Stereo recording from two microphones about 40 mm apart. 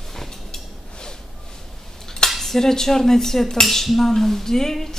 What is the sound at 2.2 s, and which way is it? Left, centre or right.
Cutlery, centre.